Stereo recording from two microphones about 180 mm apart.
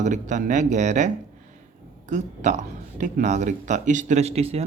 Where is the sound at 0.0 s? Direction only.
45° right (ahead or behind).